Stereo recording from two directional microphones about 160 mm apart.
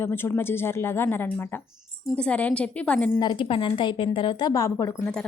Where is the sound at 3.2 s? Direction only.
30° left (ahead or behind).